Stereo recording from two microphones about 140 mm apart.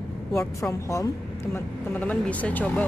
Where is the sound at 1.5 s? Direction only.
10° left (ahead or behind).